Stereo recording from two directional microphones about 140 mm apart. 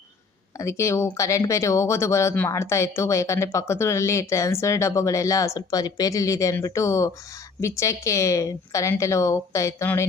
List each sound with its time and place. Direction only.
0.6 s speech: 20° left (ahead or behind)